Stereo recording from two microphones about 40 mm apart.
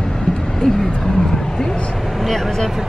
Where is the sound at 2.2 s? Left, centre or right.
Centre.